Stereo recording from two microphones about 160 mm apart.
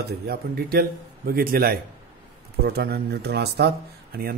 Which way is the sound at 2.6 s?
85° right.